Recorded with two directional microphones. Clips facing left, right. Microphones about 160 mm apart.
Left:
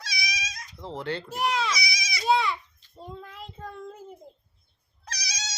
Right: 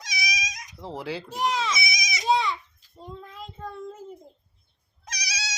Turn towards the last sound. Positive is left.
turn(degrees=-10)  # may be behind; listen again after turning